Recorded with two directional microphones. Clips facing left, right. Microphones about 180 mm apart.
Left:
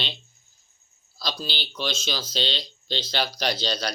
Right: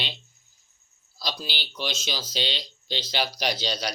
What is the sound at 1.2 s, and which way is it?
Speech, 15° right (ahead or behind).